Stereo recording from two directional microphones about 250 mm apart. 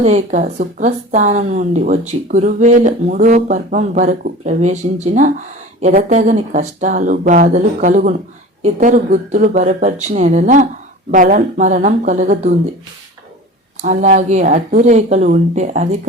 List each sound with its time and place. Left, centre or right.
0.0 s speech: right
13.8 s speech: right